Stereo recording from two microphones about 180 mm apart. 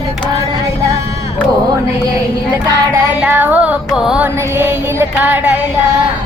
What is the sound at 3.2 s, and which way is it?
Speech, 10° right (ahead or behind).